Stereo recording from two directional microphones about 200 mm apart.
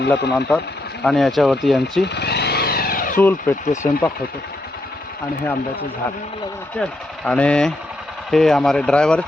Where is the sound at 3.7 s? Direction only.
15° left (ahead or behind).